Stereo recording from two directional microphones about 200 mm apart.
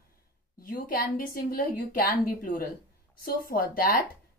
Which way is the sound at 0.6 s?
45° left (ahead or behind).